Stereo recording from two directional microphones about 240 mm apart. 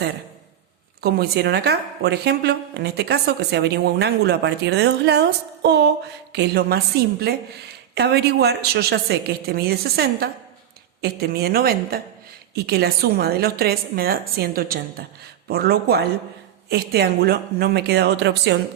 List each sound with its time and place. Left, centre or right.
1.0 s a woman's voice: right